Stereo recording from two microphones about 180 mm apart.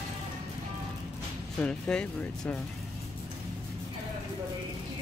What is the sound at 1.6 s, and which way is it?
Speech, 5° left (ahead or behind).